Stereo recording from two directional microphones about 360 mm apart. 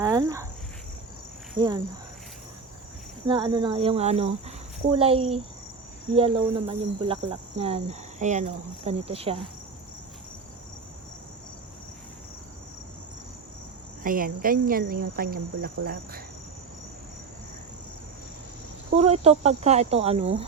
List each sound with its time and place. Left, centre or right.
0.0 s cricket: centre
1.5 s cricket: centre
3.2 s cricket: centre
14.0 s cricket: right
18.9 s cricket: centre